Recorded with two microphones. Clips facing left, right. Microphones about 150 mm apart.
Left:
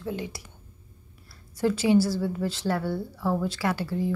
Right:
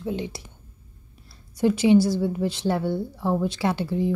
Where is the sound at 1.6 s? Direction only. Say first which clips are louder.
Right 4 dB; 20° right (ahead or behind).